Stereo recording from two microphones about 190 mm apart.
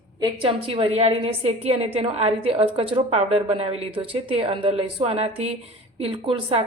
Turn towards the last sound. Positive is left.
turn(degrees=-30)  # may be behind; listen again after turning